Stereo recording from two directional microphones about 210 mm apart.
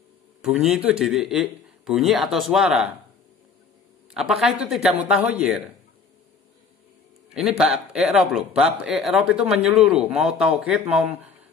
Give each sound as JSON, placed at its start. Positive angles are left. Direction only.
{"t": 0.4, "sound": "a man's voice", "side_deg": 0}
{"t": 4.1, "sound": "a man's voice", "side_deg": 0}
{"t": 7.3, "sound": "a man's voice", "side_deg": 0}